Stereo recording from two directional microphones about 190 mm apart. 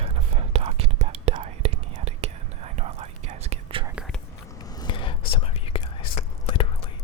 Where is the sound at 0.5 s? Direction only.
30° right (ahead or behind).